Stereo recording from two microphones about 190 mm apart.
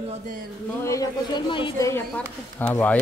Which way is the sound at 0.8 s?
20° left (ahead or behind).